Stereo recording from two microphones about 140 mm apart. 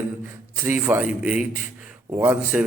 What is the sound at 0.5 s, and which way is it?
A man's voice, 15° right (ahead or behind).